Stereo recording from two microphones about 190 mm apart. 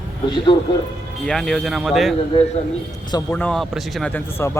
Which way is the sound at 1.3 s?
Centre (ahead or behind).